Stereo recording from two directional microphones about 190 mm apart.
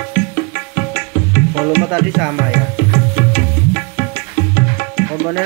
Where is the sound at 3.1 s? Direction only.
50° left (ahead or behind).